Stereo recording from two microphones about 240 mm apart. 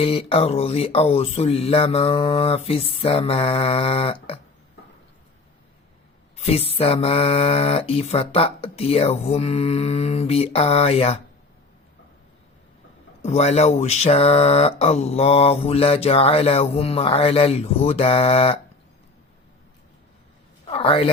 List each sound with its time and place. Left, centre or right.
0.0 s mantra: left
6.4 s mantra: left
13.2 s mantra: left
20.7 s a man's voice: left